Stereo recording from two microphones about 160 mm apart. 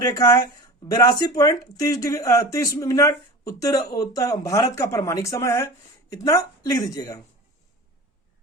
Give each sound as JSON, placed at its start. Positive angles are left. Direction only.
{"t": 0.0, "sound": "speech", "side_deg": 20}